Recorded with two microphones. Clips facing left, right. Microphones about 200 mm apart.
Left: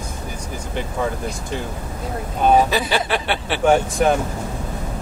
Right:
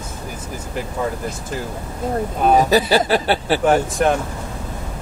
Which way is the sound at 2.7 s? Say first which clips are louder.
Right 5 dB; 40° right (ahead or behind).